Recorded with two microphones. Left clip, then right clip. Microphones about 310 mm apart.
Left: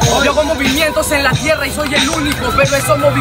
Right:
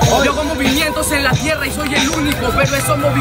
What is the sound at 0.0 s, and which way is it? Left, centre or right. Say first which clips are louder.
Music: left 1 dB; left.